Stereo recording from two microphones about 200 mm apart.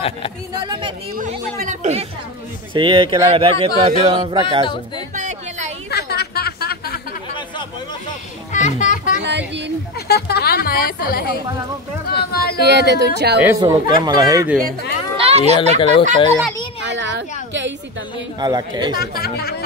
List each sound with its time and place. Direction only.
0.7 s speech: 25° right (ahead or behind)
1.1 s speech: 40° right (ahead or behind); by 4.6 s 25° right (ahead or behind)
5.1 s music: 35° right (ahead or behind)
5.9 s chatter: 55° left (ahead or behind)
8.5 s music: 35° left (ahead or behind)
9.2 s speech: 60° right (ahead or behind)
9.9 s speech: 55° left (ahead or behind)
12.6 s speech: 55° right (ahead or behind)
13.4 s speech: 10° right (ahead or behind)
15.1 s speech: 30° right (ahead or behind)
15.8 s speech: 25° left (ahead or behind)
16.9 s a sound: 65° right (ahead or behind)
18.4 s speech: 20° right (ahead or behind)
18.9 s speech: 50° left (ahead or behind)